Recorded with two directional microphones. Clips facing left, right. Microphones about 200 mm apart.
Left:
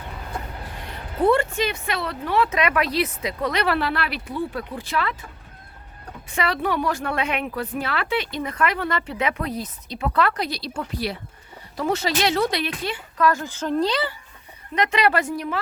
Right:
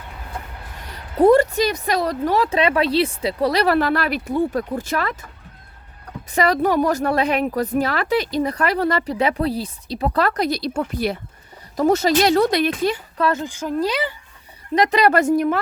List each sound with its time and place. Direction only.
1.2 s a woman's voice: 40° right (ahead or behind)
6.3 s a woman's voice: 40° right (ahead or behind)
13.1 s speech: 25° right (ahead or behind); by 14.1 s 10° right (ahead or behind)
14.8 s speech: 35° right (ahead or behind)